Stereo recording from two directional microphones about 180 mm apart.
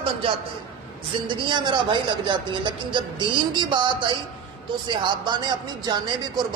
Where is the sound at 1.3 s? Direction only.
25° right (ahead or behind).